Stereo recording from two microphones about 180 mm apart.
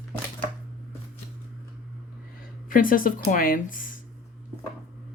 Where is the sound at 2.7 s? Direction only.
50° left (ahead or behind).